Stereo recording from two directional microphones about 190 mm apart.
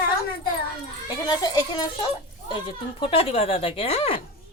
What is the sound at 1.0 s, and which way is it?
A woman's voice, 20° left (ahead or behind).